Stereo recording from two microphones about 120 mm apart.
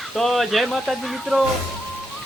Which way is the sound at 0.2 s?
Centre (ahead or behind).